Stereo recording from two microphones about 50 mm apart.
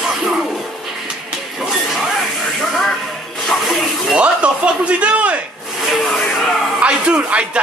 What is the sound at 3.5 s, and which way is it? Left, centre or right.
Snake, centre.